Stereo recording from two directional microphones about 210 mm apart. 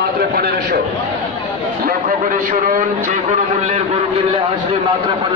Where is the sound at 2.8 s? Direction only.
35° right (ahead or behind).